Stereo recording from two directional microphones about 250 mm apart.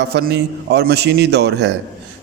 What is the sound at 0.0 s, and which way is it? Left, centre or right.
A man's voice, right.